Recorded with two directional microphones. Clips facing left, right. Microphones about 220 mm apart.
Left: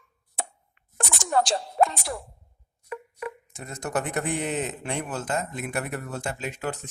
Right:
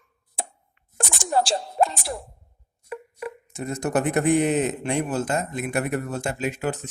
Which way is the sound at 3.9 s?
10° right (ahead or behind).